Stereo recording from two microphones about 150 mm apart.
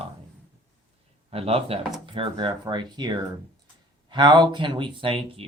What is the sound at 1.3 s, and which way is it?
Speech, 40° right (ahead or behind).